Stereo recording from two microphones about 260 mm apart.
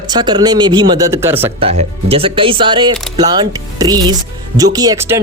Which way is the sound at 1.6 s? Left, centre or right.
Right.